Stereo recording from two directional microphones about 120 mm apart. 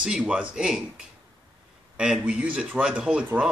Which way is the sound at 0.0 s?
5° right (ahead or behind).